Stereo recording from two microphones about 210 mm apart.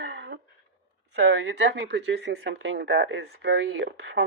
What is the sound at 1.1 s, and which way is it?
Speech, 55° right (ahead or behind).